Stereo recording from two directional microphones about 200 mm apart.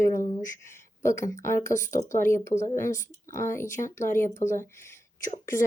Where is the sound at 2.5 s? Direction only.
35° left (ahead or behind).